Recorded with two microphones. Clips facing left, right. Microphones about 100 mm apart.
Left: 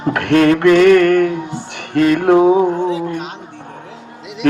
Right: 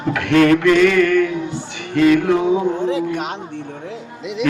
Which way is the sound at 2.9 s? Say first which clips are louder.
Even; 75° right (ahead or behind).